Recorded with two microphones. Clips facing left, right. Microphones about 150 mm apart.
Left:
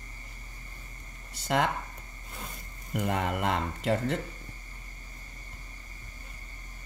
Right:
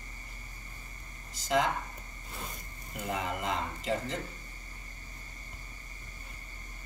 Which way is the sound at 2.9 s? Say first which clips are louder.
Left 5 dB; 65° left (ahead or behind).